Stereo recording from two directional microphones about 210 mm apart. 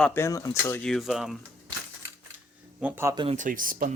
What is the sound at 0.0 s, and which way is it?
Speech, 10° left (ahead or behind).